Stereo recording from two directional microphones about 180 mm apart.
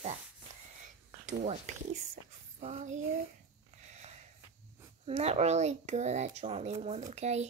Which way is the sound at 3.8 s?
40° right (ahead or behind).